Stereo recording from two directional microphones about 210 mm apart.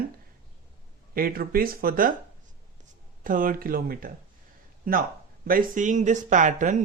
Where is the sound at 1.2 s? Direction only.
45° right (ahead or behind).